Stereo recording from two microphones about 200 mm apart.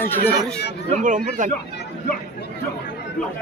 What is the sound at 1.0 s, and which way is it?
Speech, 40° right (ahead or behind).